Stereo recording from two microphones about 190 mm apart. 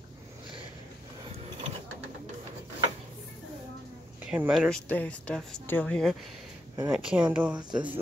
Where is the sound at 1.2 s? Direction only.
30° right (ahead or behind).